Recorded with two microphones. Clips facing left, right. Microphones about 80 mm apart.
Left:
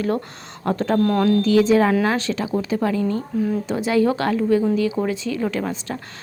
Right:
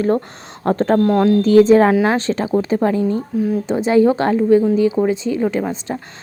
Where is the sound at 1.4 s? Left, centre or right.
Right.